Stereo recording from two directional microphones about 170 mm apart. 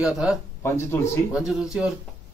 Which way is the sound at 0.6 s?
15° left (ahead or behind).